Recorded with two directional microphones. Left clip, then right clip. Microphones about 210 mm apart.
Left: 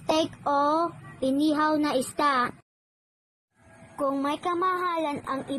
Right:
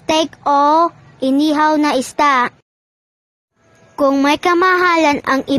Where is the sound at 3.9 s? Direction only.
50° right (ahead or behind).